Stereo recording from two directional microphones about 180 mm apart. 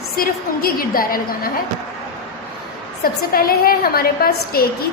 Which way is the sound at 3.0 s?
55° left (ahead or behind).